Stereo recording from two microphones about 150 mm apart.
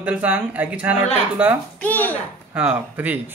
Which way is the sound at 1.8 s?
10° left (ahead or behind).